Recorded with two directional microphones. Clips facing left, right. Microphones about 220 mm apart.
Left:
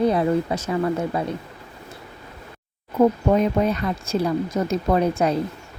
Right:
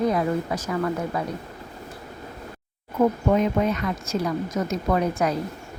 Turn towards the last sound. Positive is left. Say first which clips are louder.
# left 3 dB
turn(degrees=30)  # may be behind; listen again after turning